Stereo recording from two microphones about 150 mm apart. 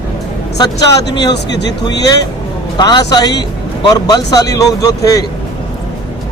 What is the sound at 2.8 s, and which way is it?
Speech, 30° left (ahead or behind).